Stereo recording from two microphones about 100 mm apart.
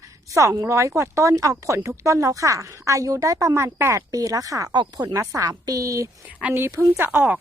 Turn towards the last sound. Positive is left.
turn(degrees=-15)  # may be behind; listen again after turning